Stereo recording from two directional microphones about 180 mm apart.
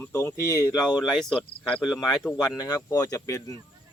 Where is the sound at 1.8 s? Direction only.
Centre (ahead or behind).